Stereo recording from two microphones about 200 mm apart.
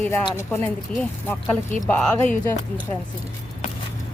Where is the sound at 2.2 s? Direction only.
40° left (ahead or behind).